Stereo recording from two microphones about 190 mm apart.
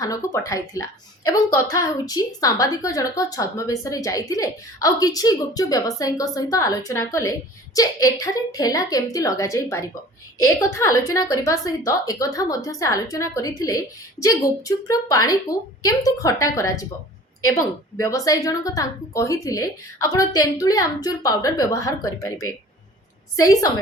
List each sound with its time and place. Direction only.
0.0 s a woman's voice: 15° left (ahead or behind)
18.0 s a woman's voice: 20° left (ahead or behind)